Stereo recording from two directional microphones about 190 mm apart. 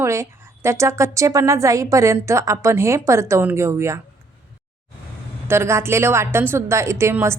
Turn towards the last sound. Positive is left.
turn(degrees=-15)  # may be behind; listen again after turning